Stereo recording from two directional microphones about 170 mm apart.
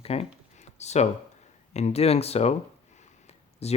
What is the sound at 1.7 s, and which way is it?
Speech, 40° left (ahead or behind).